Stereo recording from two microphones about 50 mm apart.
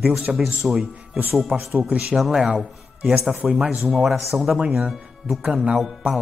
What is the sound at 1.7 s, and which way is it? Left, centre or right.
Speech, right.